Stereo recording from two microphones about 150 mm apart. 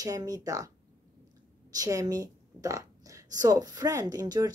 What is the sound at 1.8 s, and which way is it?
A woman's voice, 25° right (ahead or behind).